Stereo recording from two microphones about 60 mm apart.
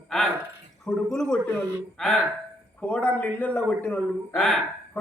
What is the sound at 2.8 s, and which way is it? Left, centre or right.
A man's voice, left.